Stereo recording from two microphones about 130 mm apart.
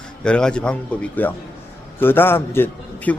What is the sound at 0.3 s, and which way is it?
A man's voice, 5° left (ahead or behind).